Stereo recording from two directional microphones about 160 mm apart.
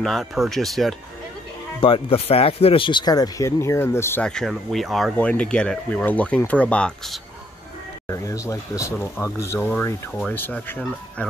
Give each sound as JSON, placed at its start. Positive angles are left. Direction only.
{"t": 0.0, "sound": "speech", "side_deg": 0}
{"t": 1.8, "sound": "speech", "side_deg": 35}
{"t": 8.1, "sound": "speech", "side_deg": 20}